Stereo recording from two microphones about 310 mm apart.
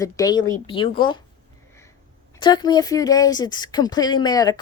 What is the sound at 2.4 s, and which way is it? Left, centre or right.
Speech, centre.